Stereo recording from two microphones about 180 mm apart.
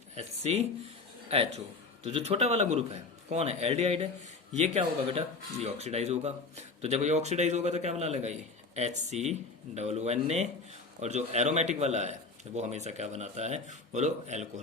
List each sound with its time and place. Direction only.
0.2 s speech: 40° right (ahead or behind)